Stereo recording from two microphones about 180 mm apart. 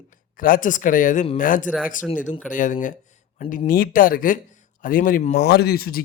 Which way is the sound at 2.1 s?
45° left (ahead or behind).